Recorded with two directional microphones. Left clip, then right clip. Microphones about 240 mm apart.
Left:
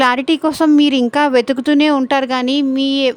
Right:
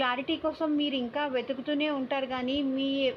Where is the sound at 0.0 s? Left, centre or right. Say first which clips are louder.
Left 15 dB; left.